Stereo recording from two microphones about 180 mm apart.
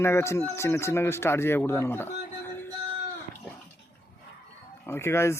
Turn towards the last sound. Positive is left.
turn(degrees=15)  # may be behind; listen again after turning